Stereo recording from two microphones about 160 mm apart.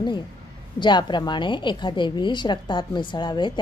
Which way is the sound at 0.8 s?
30° left (ahead or behind).